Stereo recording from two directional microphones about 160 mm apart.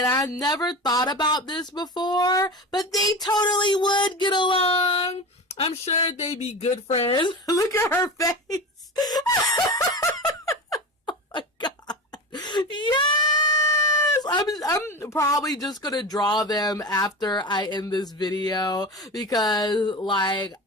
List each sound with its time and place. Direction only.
0.0 s a woman's voice: 20° left (ahead or behind)
3.0 s a sound: 25° left (ahead or behind)
14.1 s a woman's voice: 25° left (ahead or behind)